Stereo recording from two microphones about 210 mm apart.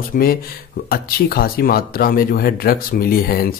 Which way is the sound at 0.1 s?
40° left (ahead or behind).